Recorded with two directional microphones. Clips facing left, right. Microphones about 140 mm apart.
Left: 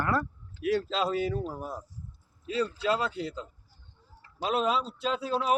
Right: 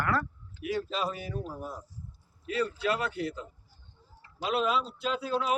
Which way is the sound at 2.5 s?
25° left (ahead or behind).